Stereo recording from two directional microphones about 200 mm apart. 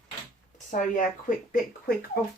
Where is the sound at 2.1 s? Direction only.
50° left (ahead or behind).